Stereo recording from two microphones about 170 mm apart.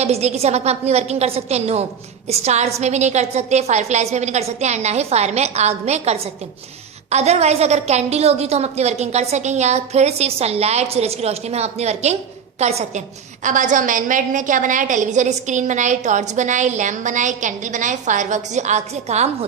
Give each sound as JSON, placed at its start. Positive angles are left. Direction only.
{"t": 0.0, "sound": "a woman's voice", "side_deg": -40}